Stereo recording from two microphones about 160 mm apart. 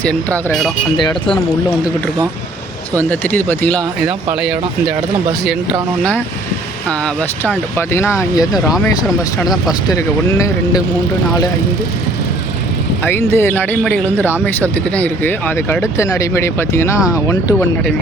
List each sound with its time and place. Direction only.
0.0 s speech: 10° left (ahead or behind)
3.0 s speech: 10° left (ahead or behind)
4.4 s speech: 5° right (ahead or behind)
6.0 s speech: 10° left (ahead or behind)
9.9 s speech: 20° left (ahead or behind)
13.1 s speech: 15° left (ahead or behind)